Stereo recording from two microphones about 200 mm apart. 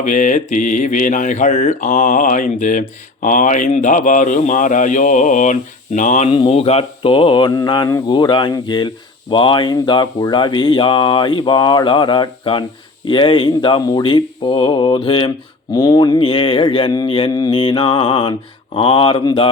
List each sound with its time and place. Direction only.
0.0 s speech: 40° left (ahead or behind)